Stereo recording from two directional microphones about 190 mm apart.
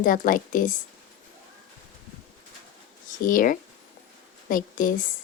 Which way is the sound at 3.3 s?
45° left (ahead or behind).